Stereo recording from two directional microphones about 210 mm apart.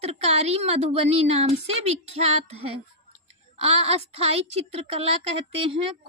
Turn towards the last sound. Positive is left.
turn(degrees=-25)  # may be behind; listen again after turning